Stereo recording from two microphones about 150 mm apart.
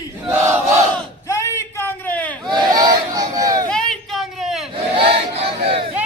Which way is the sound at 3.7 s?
5° left (ahead or behind).